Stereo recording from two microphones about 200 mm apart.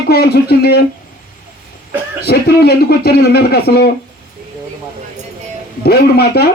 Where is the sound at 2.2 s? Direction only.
50° left (ahead or behind).